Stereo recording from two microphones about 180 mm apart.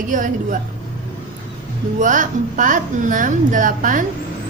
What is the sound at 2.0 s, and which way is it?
A woman's voice, 45° right (ahead or behind).